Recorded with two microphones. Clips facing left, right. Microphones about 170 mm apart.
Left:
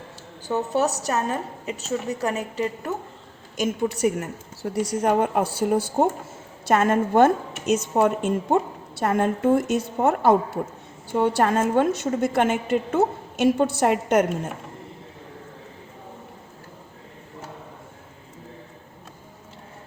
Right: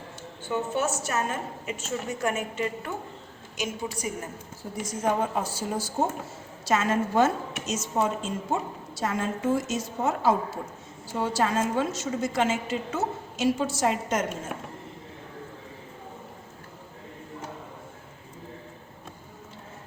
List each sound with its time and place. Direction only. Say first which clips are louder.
0.4 s a woman's voice: left 5 dB; 40° left (ahead or behind)
3.6 s a woman's voice: left 9 dB; 65° left (ahead or behind)